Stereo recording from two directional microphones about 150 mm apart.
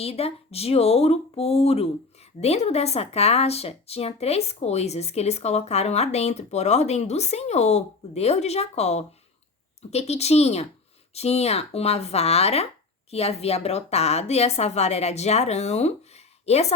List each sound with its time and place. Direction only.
0.0 s speech: 40° left (ahead or behind)